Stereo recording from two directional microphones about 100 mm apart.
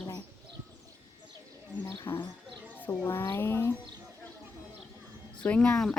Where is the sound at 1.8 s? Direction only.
25° left (ahead or behind).